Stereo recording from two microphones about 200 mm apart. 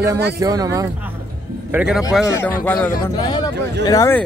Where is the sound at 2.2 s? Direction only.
15° left (ahead or behind).